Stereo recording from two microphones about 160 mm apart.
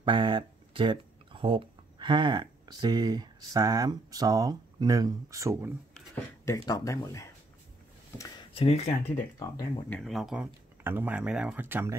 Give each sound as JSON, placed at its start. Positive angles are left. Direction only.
{"t": 0.0, "sound": "speech", "side_deg": -30}
{"t": 6.4, "sound": "speech", "side_deg": 20}
{"t": 8.5, "sound": "speech", "side_deg": 40}
{"t": 9.1, "sound": "speech", "side_deg": 25}
{"t": 9.8, "sound": "speech", "side_deg": 0}